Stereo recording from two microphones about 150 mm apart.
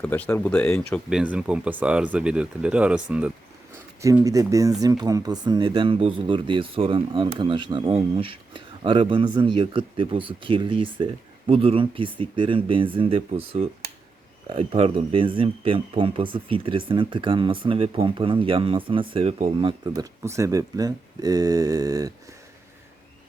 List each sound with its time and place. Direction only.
0.0 s speech: 10° left (ahead or behind)
1.1 s speech: 5° right (ahead or behind)
4.0 s speech: 20° right (ahead or behind)
19.9 s speech: 20° right (ahead or behind)